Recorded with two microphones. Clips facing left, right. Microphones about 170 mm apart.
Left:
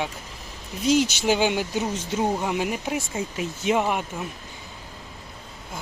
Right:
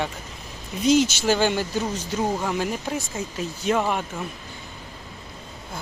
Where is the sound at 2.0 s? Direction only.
25° left (ahead or behind).